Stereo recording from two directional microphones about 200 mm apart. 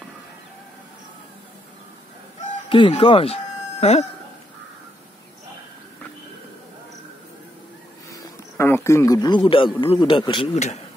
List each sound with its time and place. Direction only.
2.4 s speech: 30° left (ahead or behind)
8.1 s a man's voice: 10° left (ahead or behind); by 10.8 s 35° left (ahead or behind)